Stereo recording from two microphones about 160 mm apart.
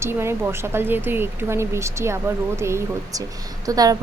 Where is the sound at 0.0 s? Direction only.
15° right (ahead or behind).